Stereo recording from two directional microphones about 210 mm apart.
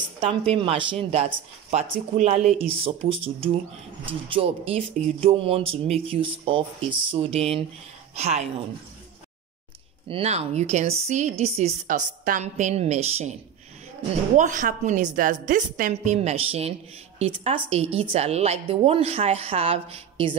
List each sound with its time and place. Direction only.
0.2 s a woman's voice: 25° right (ahead or behind)
10.0 s a woman's voice: 30° right (ahead or behind)